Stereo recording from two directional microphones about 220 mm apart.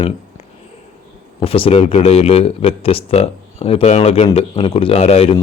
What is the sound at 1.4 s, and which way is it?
Speech, 25° left (ahead or behind).